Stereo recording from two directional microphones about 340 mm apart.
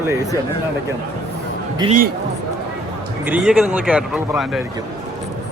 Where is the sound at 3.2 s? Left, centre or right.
Centre.